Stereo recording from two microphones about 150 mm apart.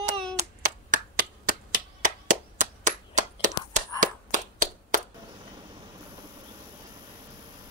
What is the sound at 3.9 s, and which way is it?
Clapping, 60° right (ahead or behind).